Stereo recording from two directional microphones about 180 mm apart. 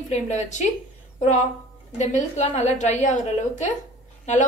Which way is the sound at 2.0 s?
40° left (ahead or behind).